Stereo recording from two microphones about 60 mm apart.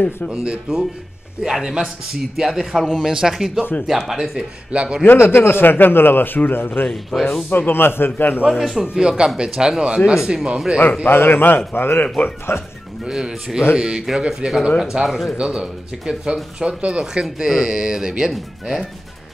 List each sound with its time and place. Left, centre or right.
0.3 s speech: centre
5.0 s a man's voice: left
6.9 s speech: centre
7.4 s a man's voice: left
8.5 s speech: centre
11.1 s a man's voice: left
13.0 s speech: centre
15.0 s speech: centre
15.3 s speech: centre